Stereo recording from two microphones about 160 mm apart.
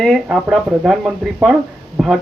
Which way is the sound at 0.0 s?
Centre (ahead or behind).